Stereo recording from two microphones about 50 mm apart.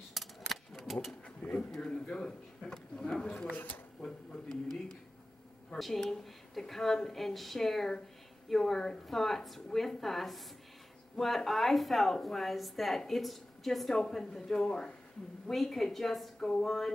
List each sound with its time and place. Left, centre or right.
0.1 s a sound: centre
1.4 s speech: left
1.8 s a man's voice: centre
3.5 s speech: left
5.8 s a woman's voice: centre
15.4 s a woman's voice: centre